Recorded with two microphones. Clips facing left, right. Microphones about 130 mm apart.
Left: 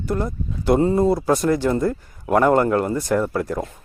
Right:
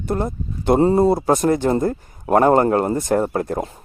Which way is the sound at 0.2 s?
25° right (ahead or behind).